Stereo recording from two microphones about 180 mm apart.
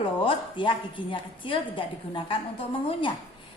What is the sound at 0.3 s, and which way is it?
A woman's voice, 30° left (ahead or behind).